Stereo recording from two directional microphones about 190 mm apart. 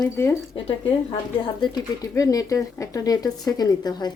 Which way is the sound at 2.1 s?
15° left (ahead or behind).